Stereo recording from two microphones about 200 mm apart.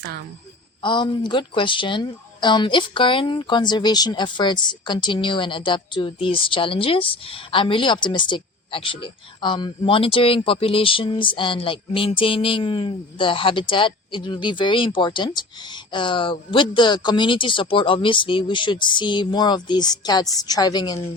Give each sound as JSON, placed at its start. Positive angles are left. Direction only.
{"t": 0.8, "sound": "speech", "side_deg": 25}